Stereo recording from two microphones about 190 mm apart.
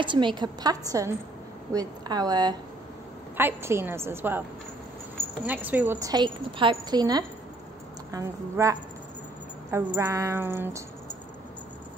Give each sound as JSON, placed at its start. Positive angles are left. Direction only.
{"t": 0.0, "sound": "a woman's voice", "side_deg": -25}
{"t": 5.5, "sound": "a woman's voice", "side_deg": -10}